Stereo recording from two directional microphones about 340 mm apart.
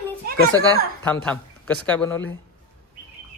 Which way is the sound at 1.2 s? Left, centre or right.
Centre.